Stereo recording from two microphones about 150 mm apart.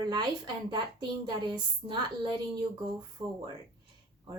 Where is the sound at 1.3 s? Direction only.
30° right (ahead or behind).